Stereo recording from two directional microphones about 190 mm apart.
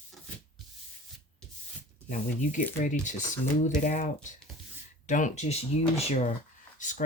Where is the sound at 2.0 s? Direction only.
40° left (ahead or behind).